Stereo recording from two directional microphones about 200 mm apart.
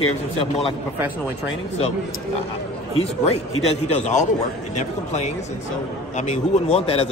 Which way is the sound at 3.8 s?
35° left (ahead or behind).